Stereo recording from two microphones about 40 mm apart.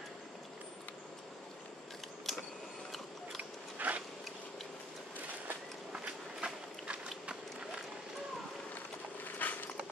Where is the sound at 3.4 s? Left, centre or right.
Right.